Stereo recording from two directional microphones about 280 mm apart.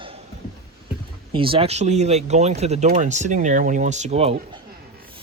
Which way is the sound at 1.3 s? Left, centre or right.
Centre.